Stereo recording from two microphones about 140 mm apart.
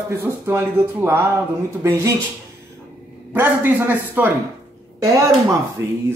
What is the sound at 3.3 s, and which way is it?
Speech, 15° right (ahead or behind).